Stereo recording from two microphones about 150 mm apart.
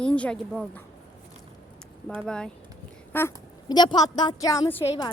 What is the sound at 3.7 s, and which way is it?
A woman's voice, 30° left (ahead or behind).